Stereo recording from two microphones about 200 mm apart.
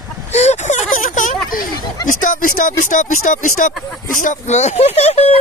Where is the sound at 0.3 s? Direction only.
35° left (ahead or behind).